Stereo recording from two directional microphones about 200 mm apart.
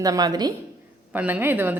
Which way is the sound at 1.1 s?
5° right (ahead or behind).